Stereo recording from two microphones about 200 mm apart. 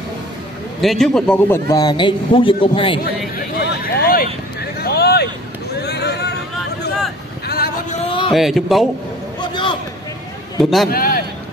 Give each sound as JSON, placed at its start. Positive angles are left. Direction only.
{"t": 0.7, "sound": "speech", "side_deg": 0}
{"t": 1.7, "sound": "speech", "side_deg": 20}
{"t": 3.5, "sound": "a sound", "side_deg": 50}
{"t": 5.8, "sound": "vehicle", "side_deg": 55}
{"t": 7.4, "sound": "a sound", "side_deg": 50}
{"t": 8.3, "sound": "speech", "side_deg": 0}
{"t": 9.4, "sound": "a sound", "side_deg": 25}
{"t": 10.6, "sound": "speech", "side_deg": 0}
{"t": 10.9, "sound": "a man's voice", "side_deg": 45}